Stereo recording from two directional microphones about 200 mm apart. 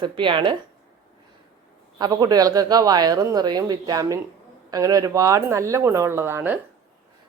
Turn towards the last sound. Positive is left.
turn(degrees=-10)  # may be behind; listen again after turning